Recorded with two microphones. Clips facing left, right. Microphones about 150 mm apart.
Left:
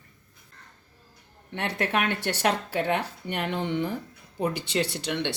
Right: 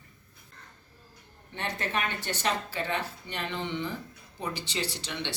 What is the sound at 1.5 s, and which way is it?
Speech, 65° left (ahead or behind).